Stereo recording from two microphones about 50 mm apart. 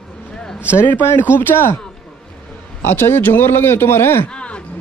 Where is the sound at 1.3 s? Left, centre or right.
Left.